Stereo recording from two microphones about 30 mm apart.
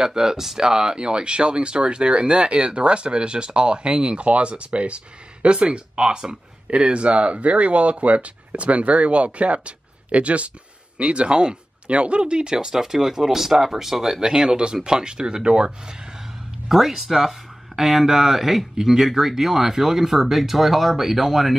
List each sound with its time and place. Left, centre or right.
0.0 s speech: centre
12.7 s speech: centre
14.2 s speech: right
16.6 s speech: centre